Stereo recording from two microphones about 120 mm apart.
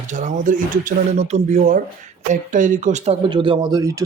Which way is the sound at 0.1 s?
90° right.